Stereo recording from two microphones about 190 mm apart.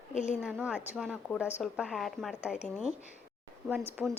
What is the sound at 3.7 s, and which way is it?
Speech, 10° right (ahead or behind).